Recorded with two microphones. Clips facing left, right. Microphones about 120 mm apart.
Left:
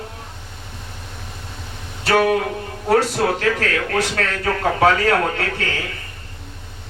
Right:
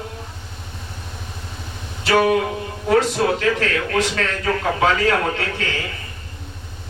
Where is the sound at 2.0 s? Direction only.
45° left (ahead or behind).